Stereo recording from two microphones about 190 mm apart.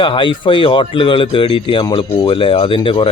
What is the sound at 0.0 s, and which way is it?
Speech, 25° left (ahead or behind).